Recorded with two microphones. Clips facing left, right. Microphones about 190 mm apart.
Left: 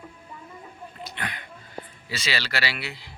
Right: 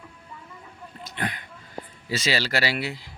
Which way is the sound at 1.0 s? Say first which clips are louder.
Right 5 dB; 45° right (ahead or behind).